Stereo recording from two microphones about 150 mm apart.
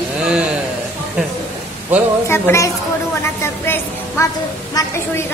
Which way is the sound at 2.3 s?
20° left (ahead or behind).